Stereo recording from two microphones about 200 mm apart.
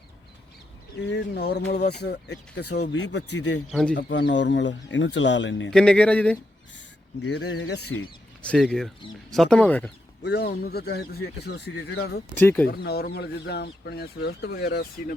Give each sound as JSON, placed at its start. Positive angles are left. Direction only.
{"t": 1.0, "sound": "speech", "side_deg": 55}
{"t": 3.7, "sound": "speech", "side_deg": 5}
{"t": 3.9, "sound": "speech", "side_deg": 65}
{"t": 5.7, "sound": "speech", "side_deg": 5}
{"t": 7.3, "sound": "speech", "side_deg": 60}
{"t": 8.4, "sound": "speech", "side_deg": 5}
{"t": 10.2, "sound": "speech", "side_deg": 55}
{"t": 12.3, "sound": "speech", "side_deg": 10}
{"t": 12.6, "sound": "speech", "side_deg": 50}